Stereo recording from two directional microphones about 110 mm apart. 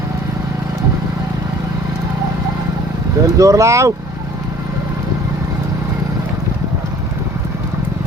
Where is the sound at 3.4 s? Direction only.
30° right (ahead or behind).